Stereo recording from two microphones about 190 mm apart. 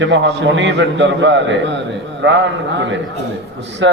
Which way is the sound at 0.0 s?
75° right (ahead or behind).